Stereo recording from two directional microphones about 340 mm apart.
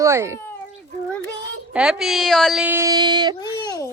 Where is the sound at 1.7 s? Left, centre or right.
Centre.